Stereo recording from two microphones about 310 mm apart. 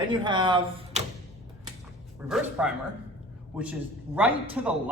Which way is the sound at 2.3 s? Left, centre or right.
Centre.